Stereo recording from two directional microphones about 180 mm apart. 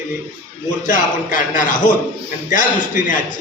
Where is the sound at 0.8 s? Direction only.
45° left (ahead or behind).